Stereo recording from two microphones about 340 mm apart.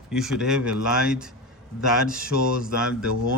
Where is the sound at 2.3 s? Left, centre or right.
Left.